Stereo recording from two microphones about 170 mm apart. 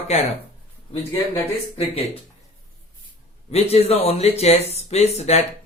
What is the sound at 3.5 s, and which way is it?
Speech, 35° left (ahead or behind).